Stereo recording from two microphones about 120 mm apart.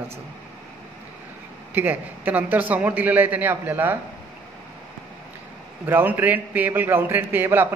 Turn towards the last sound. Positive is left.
turn(degrees=-15)  # may be behind; listen again after turning